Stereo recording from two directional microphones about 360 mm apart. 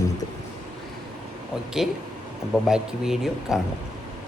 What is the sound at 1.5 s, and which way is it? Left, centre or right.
Speech, centre.